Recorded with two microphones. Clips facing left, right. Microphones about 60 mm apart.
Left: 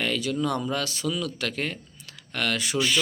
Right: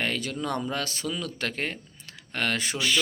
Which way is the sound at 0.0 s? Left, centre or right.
Right.